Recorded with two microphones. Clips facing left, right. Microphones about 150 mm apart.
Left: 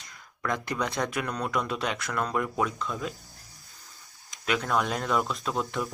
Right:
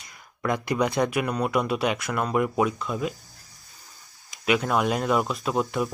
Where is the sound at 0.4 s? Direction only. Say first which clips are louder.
Right 5 dB; 10° right (ahead or behind).